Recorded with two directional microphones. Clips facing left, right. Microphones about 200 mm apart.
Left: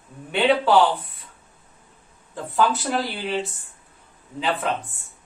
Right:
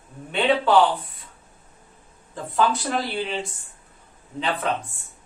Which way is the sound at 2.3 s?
Centre (ahead or behind).